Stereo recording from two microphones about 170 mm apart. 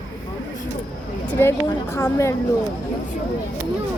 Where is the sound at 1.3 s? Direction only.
15° left (ahead or behind).